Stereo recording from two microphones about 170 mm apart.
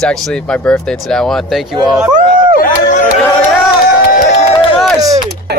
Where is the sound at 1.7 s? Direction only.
25° right (ahead or behind).